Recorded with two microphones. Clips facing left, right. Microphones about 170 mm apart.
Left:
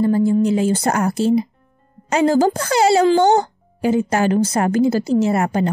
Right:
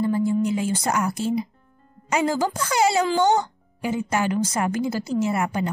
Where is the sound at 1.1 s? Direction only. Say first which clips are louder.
Left 8 dB; 30° left (ahead or behind).